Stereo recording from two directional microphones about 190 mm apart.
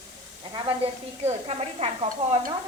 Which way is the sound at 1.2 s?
35° right (ahead or behind).